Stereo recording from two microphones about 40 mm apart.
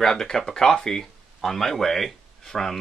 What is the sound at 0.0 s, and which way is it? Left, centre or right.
Speech, centre.